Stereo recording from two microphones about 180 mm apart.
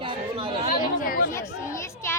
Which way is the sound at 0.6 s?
50° left (ahead or behind).